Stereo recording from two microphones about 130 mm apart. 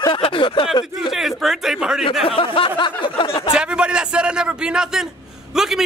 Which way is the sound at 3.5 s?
5° right (ahead or behind).